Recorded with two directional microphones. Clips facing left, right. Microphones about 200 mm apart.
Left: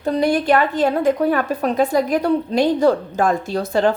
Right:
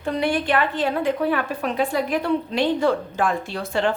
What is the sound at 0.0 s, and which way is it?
A woman's voice, 40° left (ahead or behind).